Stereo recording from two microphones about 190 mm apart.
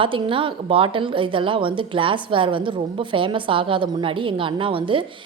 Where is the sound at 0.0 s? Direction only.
25° right (ahead or behind).